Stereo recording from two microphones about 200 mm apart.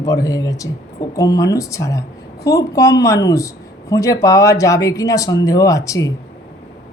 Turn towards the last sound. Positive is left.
turn(degrees=15)  # may be behind; listen again after turning